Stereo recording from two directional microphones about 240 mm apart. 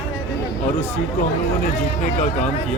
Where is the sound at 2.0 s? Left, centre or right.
Left.